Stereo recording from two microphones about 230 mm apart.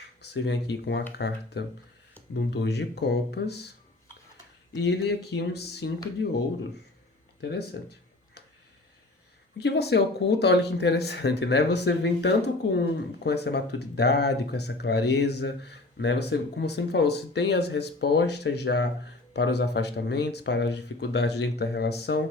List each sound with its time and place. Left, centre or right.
0.2 s speech: left
4.8 s speech: left
7.4 s speech: left
9.6 s speech: left